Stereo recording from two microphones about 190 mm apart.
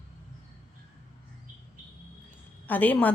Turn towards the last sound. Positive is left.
turn(degrees=10)  # may be behind; listen again after turning